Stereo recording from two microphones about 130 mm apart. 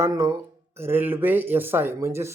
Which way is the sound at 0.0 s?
25° right (ahead or behind).